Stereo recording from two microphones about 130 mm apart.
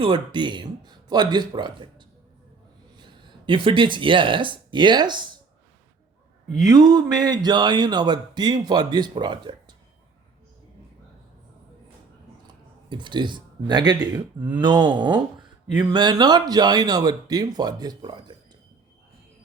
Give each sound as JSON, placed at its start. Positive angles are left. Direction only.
{"t": 0.0, "sound": "speech", "side_deg": -40}
{"t": 3.0, "sound": "speech", "side_deg": -35}
{"t": 6.7, "sound": "speech", "side_deg": -30}
{"t": 12.9, "sound": "speech", "side_deg": -35}